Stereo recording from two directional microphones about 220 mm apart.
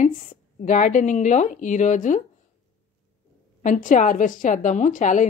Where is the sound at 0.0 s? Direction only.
35° left (ahead or behind).